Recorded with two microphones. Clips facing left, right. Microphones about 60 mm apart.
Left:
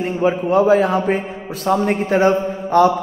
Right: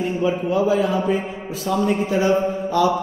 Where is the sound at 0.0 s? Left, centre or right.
Left.